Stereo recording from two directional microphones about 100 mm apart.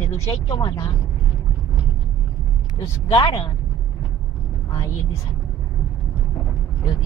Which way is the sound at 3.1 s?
55° left (ahead or behind).